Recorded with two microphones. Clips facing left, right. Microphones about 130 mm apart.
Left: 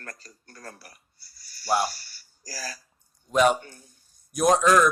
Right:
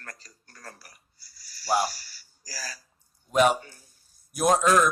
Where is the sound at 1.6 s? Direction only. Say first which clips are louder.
Left 1 dB; centre (ahead or behind).